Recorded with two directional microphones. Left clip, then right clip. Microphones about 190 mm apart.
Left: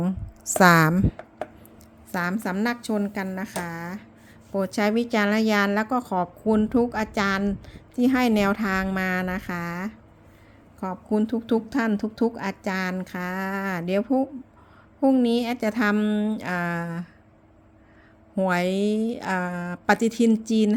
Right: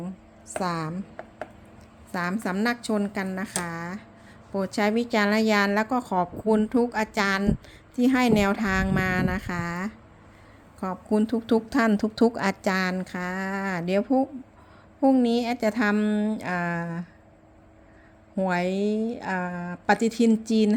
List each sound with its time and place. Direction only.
0.6 s a woman's voice: 35° left (ahead or behind)
2.1 s a woman's voice: 5° left (ahead or behind)
18.3 s a woman's voice: 5° left (ahead or behind)